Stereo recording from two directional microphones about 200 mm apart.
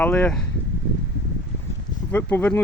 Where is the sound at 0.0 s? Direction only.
5° left (ahead or behind).